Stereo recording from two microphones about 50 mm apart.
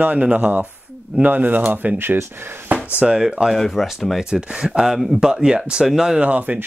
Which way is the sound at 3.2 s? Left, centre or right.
Centre.